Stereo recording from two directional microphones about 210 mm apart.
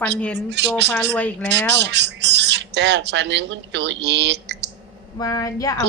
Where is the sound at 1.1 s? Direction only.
5° left (ahead or behind).